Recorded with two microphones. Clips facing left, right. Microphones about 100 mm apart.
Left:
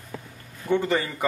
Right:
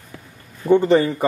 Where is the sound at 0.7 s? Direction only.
30° right (ahead or behind).